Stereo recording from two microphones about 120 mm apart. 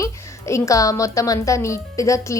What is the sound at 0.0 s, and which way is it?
A woman's voice, 25° left (ahead or behind).